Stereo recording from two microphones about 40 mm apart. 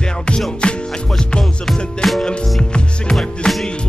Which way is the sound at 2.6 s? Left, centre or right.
Left.